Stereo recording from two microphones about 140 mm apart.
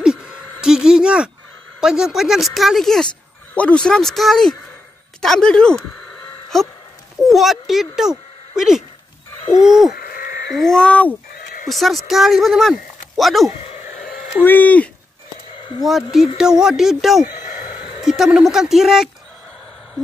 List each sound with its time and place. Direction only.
0.0 s a sound: 5° right (ahead or behind)
1.8 s speech: 5° right (ahead or behind)
9.9 s livestock: 90° left
10.6 s speech: 5° left (ahead or behind)
14.4 s speech: 15° left (ahead or behind)
15.8 s speech: centre (ahead or behind)